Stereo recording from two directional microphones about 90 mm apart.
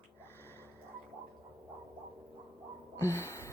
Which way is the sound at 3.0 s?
30° left (ahead or behind).